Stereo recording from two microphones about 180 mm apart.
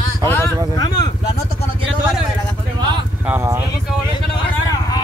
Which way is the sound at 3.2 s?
10° right (ahead or behind).